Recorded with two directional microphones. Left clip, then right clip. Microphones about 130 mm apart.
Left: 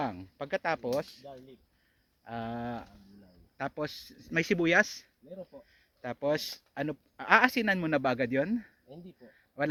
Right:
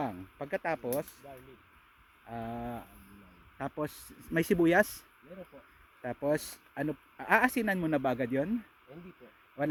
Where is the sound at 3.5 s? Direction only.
30° right (ahead or behind).